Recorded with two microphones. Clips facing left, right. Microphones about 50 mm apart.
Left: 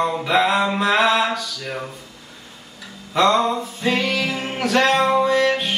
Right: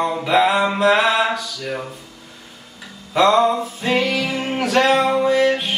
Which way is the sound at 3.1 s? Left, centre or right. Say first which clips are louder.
Right 3 dB; centre.